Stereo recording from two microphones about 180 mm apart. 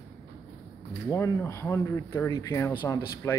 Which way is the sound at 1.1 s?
15° left (ahead or behind).